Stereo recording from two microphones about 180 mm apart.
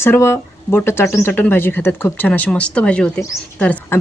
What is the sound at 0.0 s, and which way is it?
Speech, 15° left (ahead or behind).